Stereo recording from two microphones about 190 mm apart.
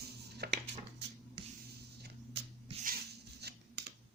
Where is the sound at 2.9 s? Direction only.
50° right (ahead or behind).